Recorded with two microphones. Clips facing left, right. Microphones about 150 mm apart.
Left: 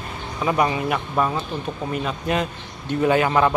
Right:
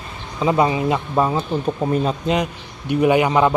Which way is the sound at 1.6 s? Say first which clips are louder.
Right 7 dB; 35° right (ahead or behind).